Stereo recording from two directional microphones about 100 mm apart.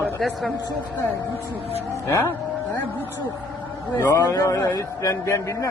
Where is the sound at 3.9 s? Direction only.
35° left (ahead or behind).